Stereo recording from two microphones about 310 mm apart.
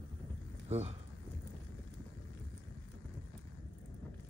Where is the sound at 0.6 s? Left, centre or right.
Centre.